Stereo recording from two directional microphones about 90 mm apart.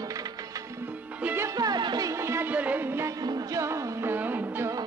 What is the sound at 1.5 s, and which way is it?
Music, 50° right (ahead or behind).